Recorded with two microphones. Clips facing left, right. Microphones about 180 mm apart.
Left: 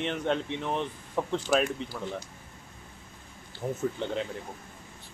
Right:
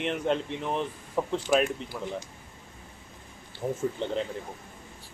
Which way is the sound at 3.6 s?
5° right (ahead or behind).